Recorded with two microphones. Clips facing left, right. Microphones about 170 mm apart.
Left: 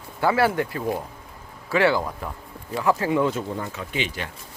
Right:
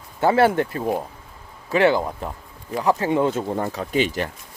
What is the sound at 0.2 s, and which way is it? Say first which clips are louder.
Speech: right 4 dB; 25° right (ahead or behind).